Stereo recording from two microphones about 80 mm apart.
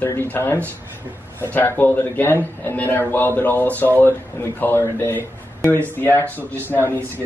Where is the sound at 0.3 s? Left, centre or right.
Left.